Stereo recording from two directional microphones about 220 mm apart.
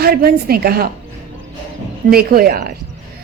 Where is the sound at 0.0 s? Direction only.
45° right (ahead or behind).